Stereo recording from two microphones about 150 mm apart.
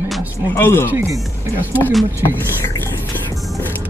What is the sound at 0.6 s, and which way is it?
Speech, 15° left (ahead or behind).